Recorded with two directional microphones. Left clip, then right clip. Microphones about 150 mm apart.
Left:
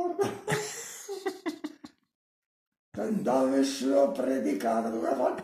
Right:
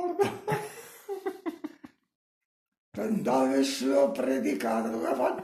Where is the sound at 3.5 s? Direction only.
5° right (ahead or behind).